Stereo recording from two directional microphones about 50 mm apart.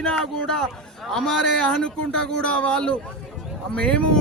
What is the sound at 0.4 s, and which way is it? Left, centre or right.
Speech, centre.